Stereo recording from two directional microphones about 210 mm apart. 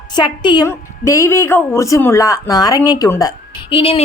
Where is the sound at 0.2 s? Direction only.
20° left (ahead or behind).